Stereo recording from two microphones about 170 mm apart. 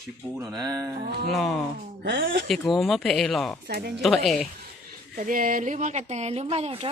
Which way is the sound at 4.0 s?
Centre (ahead or behind).